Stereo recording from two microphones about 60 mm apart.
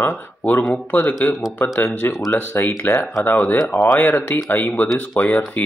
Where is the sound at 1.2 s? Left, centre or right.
Left.